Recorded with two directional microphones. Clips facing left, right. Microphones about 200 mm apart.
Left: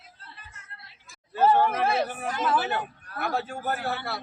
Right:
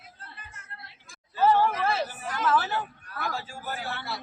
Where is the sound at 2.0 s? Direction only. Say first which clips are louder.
Left 4 dB; 60° left (ahead or behind).